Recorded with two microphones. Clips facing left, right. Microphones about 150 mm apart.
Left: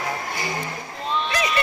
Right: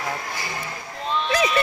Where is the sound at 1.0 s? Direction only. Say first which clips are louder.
Right 2 dB; centre (ahead or behind).